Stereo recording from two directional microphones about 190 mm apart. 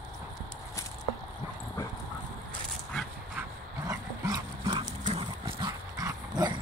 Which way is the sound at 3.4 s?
20° right (ahead or behind).